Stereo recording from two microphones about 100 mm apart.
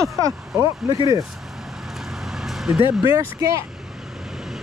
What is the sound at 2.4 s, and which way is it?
Vehicle, 5° right (ahead or behind).